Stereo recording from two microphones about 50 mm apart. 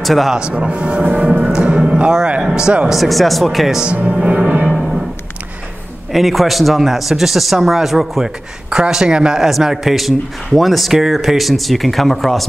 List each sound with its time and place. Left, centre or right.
0.0 s speech: centre
0.5 s speech: right
1.4 s music: centre
1.9 s a sound: right
2.1 s speech: centre
2.9 s a man's voice: centre
3.8 s speech: right
4.3 s music: right
4.6 s music: centre
6.1 s a man's voice: centre
8.6 s a man's voice: centre